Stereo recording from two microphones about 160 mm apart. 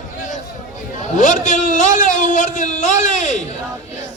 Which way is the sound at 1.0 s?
55° left (ahead or behind).